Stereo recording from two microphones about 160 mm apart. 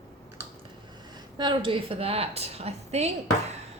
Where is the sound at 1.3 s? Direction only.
30° right (ahead or behind).